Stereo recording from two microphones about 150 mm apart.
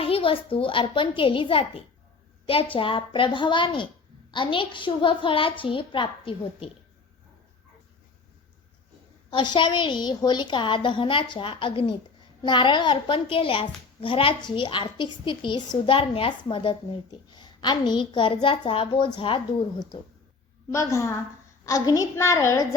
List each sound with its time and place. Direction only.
0.0 s a woman's voice: 40° left (ahead or behind)
9.3 s a woman's voice: 30° left (ahead or behind)
20.7 s a child's voice: 20° left (ahead or behind)